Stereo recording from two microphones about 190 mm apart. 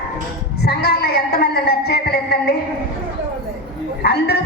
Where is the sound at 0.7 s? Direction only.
55° left (ahead or behind).